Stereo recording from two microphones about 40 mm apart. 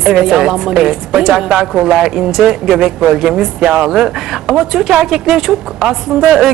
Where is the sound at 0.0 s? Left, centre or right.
Centre.